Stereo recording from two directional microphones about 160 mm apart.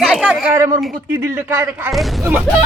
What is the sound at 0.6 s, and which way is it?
Speech, 15° right (ahead or behind).